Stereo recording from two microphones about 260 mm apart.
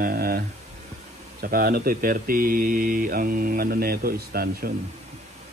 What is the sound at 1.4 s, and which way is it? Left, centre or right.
Speech, right.